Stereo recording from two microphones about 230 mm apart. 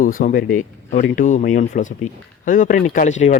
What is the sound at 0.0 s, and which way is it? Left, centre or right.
Speech, left.